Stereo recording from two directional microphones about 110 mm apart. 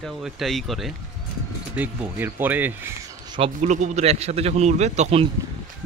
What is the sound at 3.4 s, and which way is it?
A man's voice, 90° right.